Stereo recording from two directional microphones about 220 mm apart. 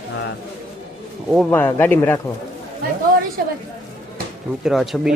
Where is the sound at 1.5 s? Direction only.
10° left (ahead or behind).